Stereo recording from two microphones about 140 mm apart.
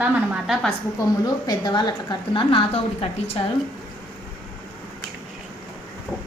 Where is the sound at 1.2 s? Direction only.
30° left (ahead or behind); by 3.4 s 45° left (ahead or behind).